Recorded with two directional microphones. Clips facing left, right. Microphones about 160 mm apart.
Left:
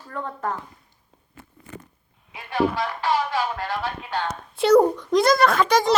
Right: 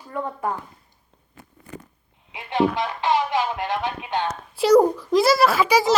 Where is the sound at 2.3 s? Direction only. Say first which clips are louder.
Right 2 dB; 20° right (ahead or behind).